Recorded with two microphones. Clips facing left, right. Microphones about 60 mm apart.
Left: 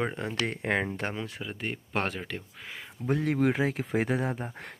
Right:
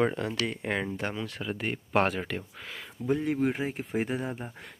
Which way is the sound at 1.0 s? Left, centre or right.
Left.